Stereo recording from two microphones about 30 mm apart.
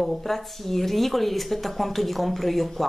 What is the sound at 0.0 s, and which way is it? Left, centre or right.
Speech, centre.